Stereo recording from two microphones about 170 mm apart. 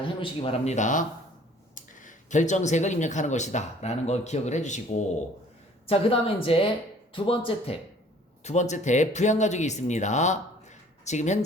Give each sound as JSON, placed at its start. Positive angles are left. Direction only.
{"t": 0.2, "sound": "speech", "side_deg": 35}
{"t": 5.8, "sound": "speech", "side_deg": 35}
{"t": 8.4, "sound": "speech", "side_deg": 45}